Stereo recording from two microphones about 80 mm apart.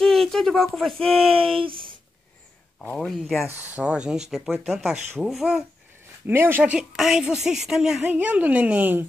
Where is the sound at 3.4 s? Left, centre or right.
Right; by 5.7 s centre.